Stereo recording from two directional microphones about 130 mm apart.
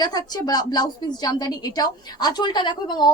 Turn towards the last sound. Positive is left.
turn(degrees=35)  # may be behind; listen again after turning